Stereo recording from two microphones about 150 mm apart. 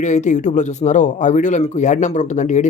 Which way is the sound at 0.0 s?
50° left (ahead or behind).